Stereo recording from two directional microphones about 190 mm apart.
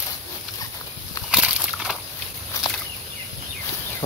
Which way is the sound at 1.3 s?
5° right (ahead or behind).